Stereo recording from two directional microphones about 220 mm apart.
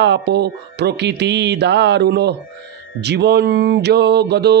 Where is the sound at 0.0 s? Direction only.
50° right (ahead or behind).